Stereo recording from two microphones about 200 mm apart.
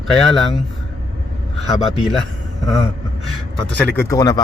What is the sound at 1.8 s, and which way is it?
Speech, centre (ahead or behind).